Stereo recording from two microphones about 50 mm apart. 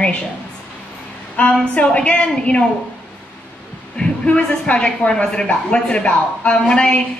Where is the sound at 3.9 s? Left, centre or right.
Left.